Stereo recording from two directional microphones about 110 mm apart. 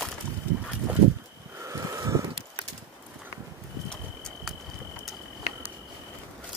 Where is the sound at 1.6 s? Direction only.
30° right (ahead or behind).